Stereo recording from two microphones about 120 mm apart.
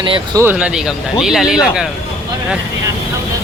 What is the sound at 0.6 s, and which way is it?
Speech, 5° right (ahead or behind).